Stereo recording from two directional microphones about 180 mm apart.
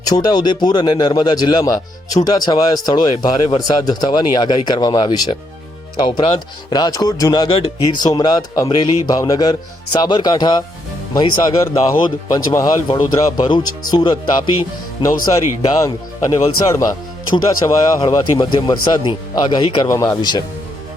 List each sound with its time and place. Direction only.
0.0 s speech: 20° left (ahead or behind)
6.7 s speech: 25° left (ahead or behind)